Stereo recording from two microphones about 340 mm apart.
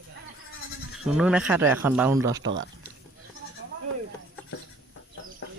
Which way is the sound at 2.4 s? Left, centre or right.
Right.